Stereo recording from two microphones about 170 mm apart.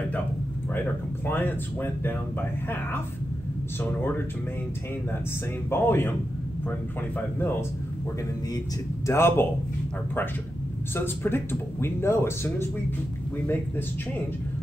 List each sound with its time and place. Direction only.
1.2 s speech: 10° left (ahead or behind)
5.7 s speech: 15° left (ahead or behind)
9.0 s speech: 15° left (ahead or behind)
11.0 s speech: 15° left (ahead or behind)